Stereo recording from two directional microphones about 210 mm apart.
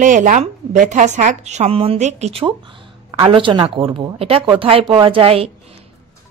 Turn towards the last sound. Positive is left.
turn(degrees=-25)  # may be behind; listen again after turning